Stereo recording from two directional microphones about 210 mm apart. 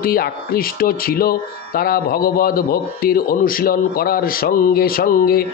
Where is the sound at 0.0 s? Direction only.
45° left (ahead or behind).